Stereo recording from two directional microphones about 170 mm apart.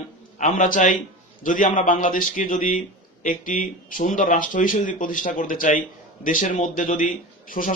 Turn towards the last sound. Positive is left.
turn(degrees=50)  # may be behind; listen again after turning